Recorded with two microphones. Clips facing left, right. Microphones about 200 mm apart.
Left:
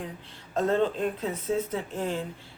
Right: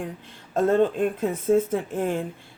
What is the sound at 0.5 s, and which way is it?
Speech, 50° right (ahead or behind).